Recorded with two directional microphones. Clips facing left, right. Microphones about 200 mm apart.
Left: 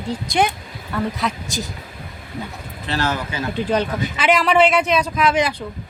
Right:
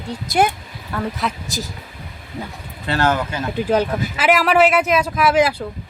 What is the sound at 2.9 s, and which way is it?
Speech, 55° right (ahead or behind).